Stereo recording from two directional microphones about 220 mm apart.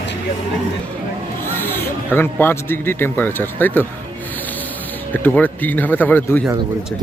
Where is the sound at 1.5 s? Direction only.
10° left (ahead or behind).